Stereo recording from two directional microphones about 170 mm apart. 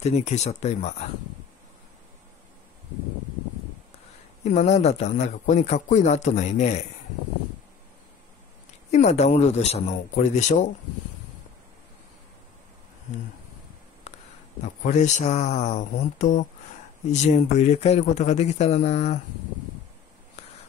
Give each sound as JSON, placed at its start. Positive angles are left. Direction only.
{"t": 0.0, "sound": "speech", "side_deg": 40}
{"t": 4.5, "sound": "speech", "side_deg": 45}
{"t": 8.9, "sound": "speech", "side_deg": 40}
{"t": 14.1, "sound": "a sound", "side_deg": 40}
{"t": 14.6, "sound": "speech", "side_deg": 45}